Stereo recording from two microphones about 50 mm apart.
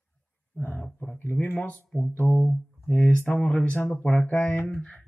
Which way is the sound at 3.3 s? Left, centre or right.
Left.